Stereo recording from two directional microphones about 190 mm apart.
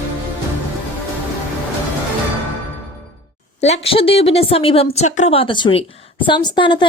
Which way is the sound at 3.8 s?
30° left (ahead or behind).